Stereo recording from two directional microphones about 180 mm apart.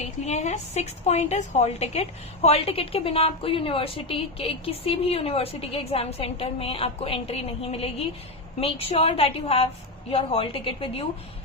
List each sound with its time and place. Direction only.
0.0 s a woman's voice: 40° left (ahead or behind)